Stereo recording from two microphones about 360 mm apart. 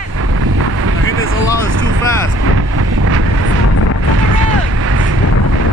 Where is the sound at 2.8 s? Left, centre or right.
Right.